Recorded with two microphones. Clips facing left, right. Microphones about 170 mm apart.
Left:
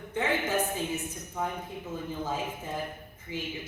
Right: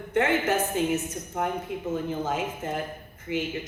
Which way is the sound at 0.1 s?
85° right.